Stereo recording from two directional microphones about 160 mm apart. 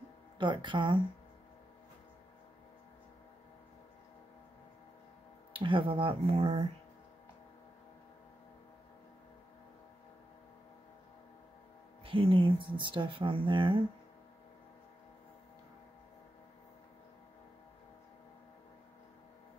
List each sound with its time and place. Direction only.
0.4 s speech: 30° right (ahead or behind)
5.5 s speech: 30° right (ahead or behind)
12.0 s speech: 35° right (ahead or behind)